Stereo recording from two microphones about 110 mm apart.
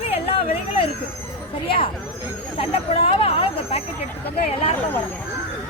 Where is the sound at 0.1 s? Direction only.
60° left (ahead or behind).